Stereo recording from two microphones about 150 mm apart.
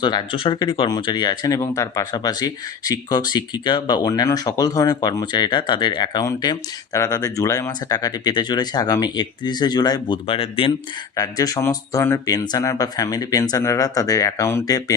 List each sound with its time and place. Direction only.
0.0 s speech: 30° left (ahead or behind)
11.2 s speech: 25° left (ahead or behind)